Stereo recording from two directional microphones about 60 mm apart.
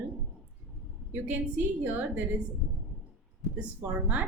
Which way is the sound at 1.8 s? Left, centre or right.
Right.